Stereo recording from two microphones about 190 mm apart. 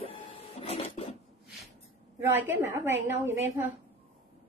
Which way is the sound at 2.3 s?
10° right (ahead or behind).